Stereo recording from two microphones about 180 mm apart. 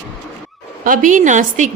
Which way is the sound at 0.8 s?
50° right (ahead or behind).